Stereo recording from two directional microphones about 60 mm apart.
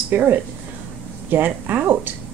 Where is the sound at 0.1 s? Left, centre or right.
Right.